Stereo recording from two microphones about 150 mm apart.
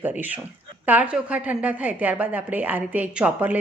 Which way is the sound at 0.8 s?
10° right (ahead or behind).